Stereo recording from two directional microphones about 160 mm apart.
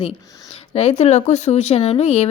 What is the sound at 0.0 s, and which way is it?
Speech, 35° left (ahead or behind).